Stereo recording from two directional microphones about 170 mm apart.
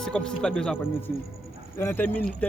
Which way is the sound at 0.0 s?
5° left (ahead or behind).